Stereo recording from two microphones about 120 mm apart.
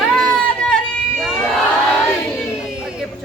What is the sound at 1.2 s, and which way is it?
Crowd, 5° left (ahead or behind).